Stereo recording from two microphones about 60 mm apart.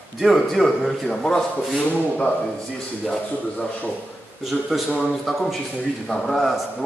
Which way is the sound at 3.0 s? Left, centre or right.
Centre.